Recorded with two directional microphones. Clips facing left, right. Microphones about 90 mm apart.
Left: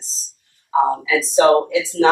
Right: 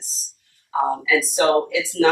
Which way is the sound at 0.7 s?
30° left (ahead or behind).